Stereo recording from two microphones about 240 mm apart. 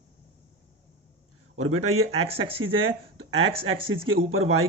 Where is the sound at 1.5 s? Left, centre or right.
Right.